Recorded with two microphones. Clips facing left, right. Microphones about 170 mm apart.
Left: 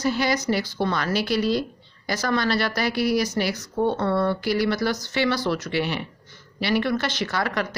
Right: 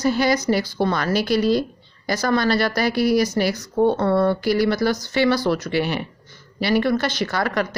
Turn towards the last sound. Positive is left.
turn(degrees=-45)  # may be behind; listen again after turning